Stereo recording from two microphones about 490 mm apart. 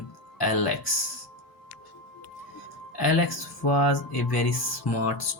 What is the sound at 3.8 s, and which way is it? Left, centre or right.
Speech, left.